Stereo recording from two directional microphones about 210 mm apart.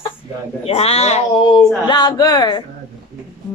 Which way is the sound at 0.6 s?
30° left (ahead or behind).